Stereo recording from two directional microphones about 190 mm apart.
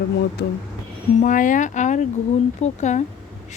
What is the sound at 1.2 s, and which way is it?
Speech, 45° left (ahead or behind).